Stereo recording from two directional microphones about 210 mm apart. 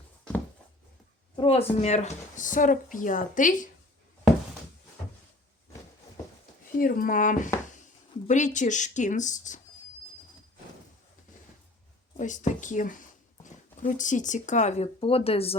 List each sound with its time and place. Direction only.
1.4 s speech: 25° left (ahead or behind)
6.7 s speech: 40° left (ahead or behind)
12.1 s speech: 35° left (ahead or behind)